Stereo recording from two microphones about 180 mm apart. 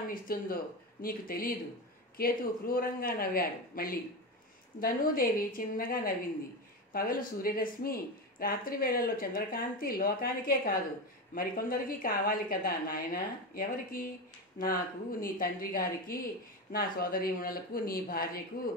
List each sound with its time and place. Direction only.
0.1 s speech: 55° left (ahead or behind)